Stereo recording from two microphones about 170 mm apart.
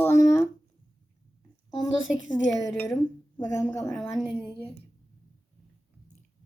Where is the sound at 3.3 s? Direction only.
20° left (ahead or behind).